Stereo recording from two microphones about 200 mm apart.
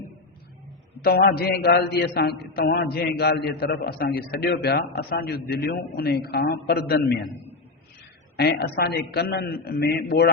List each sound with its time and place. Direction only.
1.0 s a man's voice: 50° left (ahead or behind)
8.4 s a man's voice: 55° left (ahead or behind)